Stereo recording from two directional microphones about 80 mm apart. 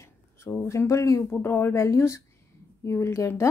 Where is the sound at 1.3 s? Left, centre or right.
Left.